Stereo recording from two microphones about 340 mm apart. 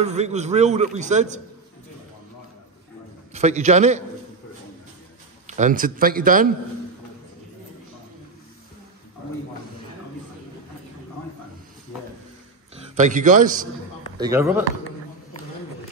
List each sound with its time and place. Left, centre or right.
0.0 s a man's voice: centre
3.3 s a man's voice: centre
5.5 s a man's voice: right
12.9 s a man's voice: right
14.1 s speech: centre